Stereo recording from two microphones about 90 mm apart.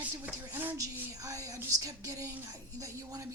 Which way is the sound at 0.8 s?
40° right (ahead or behind).